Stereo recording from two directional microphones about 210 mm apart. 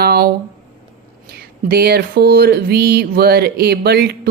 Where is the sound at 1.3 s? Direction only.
50° right (ahead or behind).